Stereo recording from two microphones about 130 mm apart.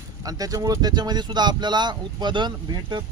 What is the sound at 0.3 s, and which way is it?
Speech, 30° right (ahead or behind).